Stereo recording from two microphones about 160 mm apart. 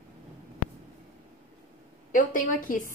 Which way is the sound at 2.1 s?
55° left (ahead or behind).